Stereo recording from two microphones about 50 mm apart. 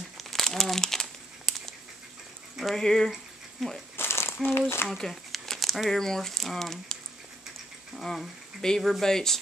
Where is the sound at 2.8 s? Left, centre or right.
Centre.